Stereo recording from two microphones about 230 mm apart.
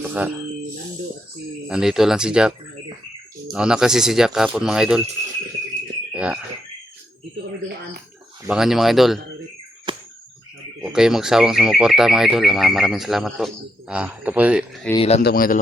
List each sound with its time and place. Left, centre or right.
0.0 s a sound: centre
1.6 s speech: centre
3.5 s speech: centre
6.1 s a sound: centre
8.4 s speech: centre
9.9 s a sound: right
10.8 s speech: centre
14.9 s speech: left
15.2 s speech: left